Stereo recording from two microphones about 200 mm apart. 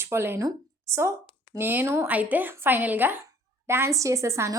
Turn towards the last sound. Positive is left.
turn(degrees=-15)  # may be behind; listen again after turning